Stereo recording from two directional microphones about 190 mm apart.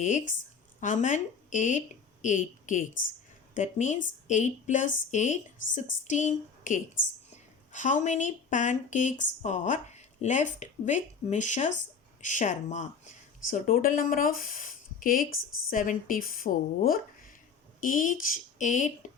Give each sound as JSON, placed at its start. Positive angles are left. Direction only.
{"t": 0.0, "sound": "speech", "side_deg": 40}
{"t": 15.3, "sound": "a woman's voice", "side_deg": 90}
{"t": 15.7, "sound": "speech", "side_deg": 45}